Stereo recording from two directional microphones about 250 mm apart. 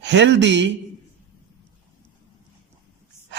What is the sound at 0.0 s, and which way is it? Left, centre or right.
Speech, right.